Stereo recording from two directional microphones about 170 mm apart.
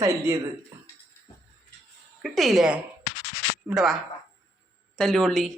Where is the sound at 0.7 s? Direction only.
15° right (ahead or behind).